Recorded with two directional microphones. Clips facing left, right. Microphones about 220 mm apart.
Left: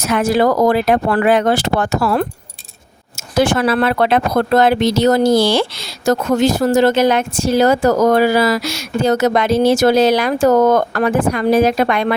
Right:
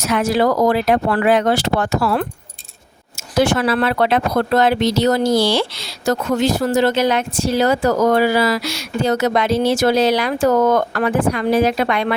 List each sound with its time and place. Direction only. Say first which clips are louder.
0.0 s speech: left 2 dB; 50° left (ahead or behind)